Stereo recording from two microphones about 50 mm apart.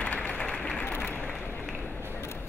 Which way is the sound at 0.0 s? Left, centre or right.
Left.